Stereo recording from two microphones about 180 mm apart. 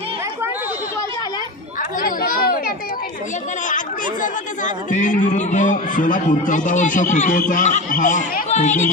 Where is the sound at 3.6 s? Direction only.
45° left (ahead or behind).